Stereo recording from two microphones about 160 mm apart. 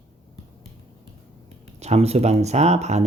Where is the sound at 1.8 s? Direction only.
45° right (ahead or behind).